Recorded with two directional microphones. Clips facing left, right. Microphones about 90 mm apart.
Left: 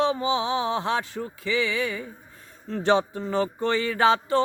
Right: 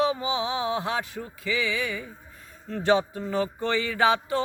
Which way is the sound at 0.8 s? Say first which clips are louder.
Left 3 dB; 30° left (ahead or behind).